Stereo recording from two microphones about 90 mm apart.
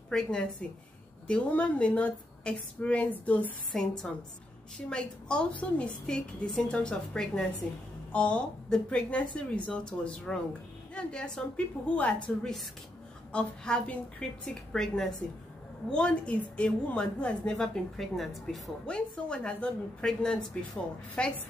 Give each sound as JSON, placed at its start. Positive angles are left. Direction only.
{"t": 0.1, "sound": "a woman's voice", "side_deg": 5}
{"t": 3.7, "sound": "a woman's voice", "side_deg": 5}
{"t": 13.3, "sound": "a woman's voice", "side_deg": 10}